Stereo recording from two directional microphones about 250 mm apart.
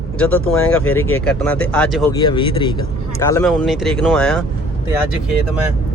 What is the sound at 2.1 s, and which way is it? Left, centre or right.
Speech, centre.